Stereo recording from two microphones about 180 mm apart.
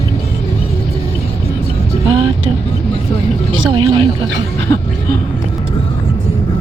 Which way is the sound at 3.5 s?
30° right (ahead or behind).